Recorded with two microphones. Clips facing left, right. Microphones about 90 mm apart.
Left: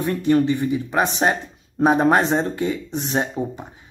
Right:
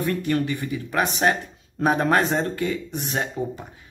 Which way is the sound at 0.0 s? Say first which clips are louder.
Left 5 dB; 25° left (ahead or behind).